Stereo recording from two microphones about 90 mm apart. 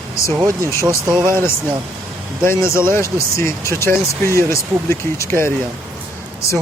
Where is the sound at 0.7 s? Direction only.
35° left (ahead or behind).